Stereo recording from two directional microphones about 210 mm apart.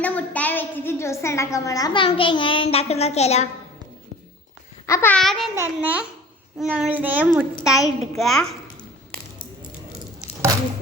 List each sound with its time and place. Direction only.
0.0 s a woman's voice: 5° left (ahead or behind); by 3.5 s 30° left (ahead or behind)
4.9 s a child's voice: 10° left (ahead or behind)